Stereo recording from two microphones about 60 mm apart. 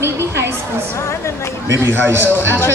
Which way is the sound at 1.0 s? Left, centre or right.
Left.